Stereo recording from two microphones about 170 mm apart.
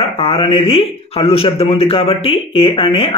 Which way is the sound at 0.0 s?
35° left (ahead or behind).